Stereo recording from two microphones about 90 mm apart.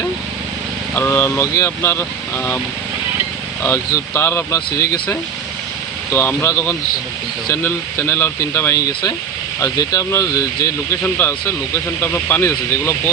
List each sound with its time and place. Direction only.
0.9 s speech: 25° left (ahead or behind)
3.6 s speech: 30° left (ahead or behind)
6.1 s speech: 25° left (ahead or behind)
9.6 s speech: 40° left (ahead or behind)
11.0 s speech: 25° left (ahead or behind)